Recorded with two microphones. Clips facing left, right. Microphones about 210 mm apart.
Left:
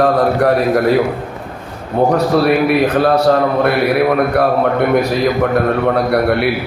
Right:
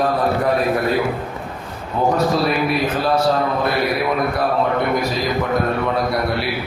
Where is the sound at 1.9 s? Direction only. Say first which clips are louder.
Left 5 dB; 60° left (ahead or behind).